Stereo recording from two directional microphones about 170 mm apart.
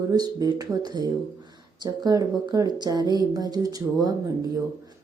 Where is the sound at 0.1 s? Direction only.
20° right (ahead or behind).